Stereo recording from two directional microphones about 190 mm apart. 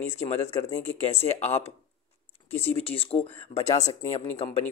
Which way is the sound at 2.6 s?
30° left (ahead or behind).